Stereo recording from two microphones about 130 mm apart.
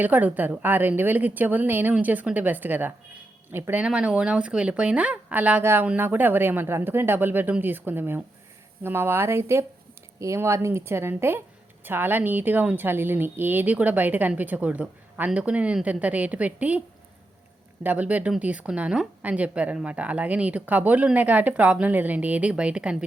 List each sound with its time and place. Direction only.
0.0 s speech: 10° right (ahead or behind)
17.8 s speech: 10° right (ahead or behind)